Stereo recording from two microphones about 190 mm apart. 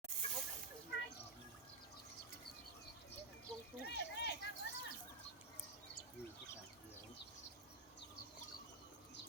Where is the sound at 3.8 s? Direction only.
60° left (ahead or behind).